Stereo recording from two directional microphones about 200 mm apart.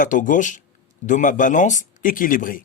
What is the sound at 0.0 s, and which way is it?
Speech, 40° left (ahead or behind).